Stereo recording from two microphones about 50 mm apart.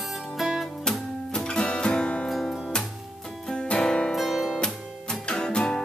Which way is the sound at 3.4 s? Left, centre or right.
Centre.